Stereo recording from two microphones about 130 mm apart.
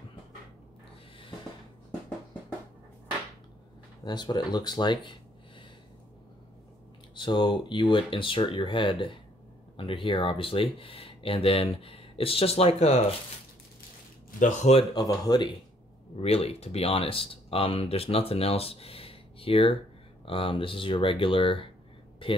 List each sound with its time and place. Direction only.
4.0 s speech: 35° left (ahead or behind)
7.2 s speech: 35° left (ahead or behind); by 13.0 s 55° left (ahead or behind)
14.4 s speech: 55° left (ahead or behind)
15.0 s speech: 30° left (ahead or behind)
16.2 s speech: 50° left (ahead or behind)